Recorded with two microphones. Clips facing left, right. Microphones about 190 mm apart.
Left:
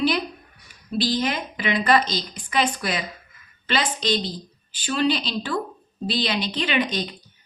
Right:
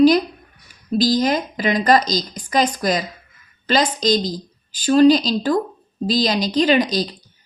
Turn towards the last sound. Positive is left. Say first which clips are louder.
# right 7 dB
turn(degrees=-35)  # may be behind; listen again after turning